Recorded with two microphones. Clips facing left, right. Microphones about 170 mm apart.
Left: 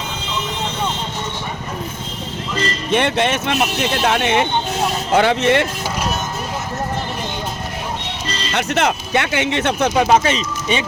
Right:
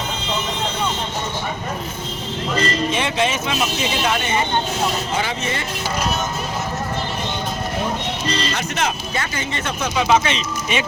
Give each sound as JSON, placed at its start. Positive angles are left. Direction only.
{"t": 2.9, "sound": "speech", "side_deg": 65}
{"t": 8.5, "sound": "speech", "side_deg": 65}
{"t": 9.9, "sound": "speech", "side_deg": 50}